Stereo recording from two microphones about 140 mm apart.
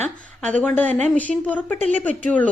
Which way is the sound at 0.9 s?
55° right (ahead or behind).